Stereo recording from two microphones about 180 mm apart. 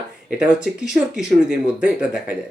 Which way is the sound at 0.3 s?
5° right (ahead or behind).